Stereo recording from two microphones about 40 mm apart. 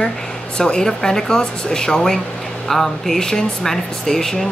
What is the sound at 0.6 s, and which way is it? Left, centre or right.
Speech, centre.